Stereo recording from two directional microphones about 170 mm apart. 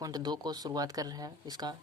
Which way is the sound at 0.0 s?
25° right (ahead or behind).